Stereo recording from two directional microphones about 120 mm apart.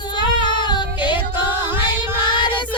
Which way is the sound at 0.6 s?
35° left (ahead or behind).